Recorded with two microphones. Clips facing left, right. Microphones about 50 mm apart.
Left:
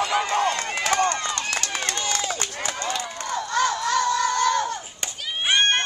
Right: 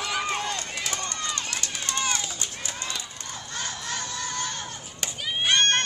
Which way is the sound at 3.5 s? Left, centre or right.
Left.